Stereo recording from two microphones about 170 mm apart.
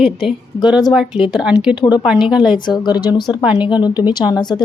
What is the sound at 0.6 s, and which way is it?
Speech, 25° left (ahead or behind).